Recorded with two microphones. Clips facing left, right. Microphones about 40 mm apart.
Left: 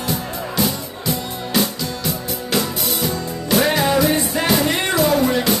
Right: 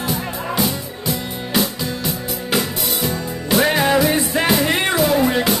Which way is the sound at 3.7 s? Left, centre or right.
Centre.